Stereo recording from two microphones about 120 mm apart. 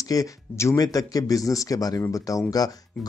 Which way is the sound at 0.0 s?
30° left (ahead or behind).